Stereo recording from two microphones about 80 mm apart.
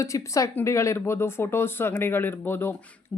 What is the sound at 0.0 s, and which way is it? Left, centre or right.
A woman's voice, left.